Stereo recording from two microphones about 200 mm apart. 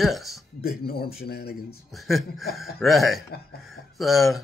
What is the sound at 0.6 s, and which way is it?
Speech, 50° left (ahead or behind).